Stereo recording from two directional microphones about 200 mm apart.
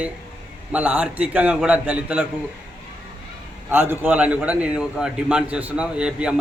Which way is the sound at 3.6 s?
10° right (ahead or behind).